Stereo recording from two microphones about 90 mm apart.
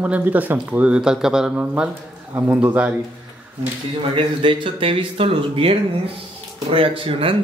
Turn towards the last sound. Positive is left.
turn(degrees=-80)